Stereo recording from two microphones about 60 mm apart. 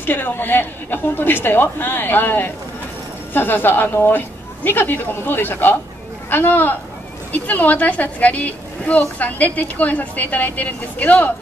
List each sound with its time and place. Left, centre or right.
0.0 s a woman's voice: left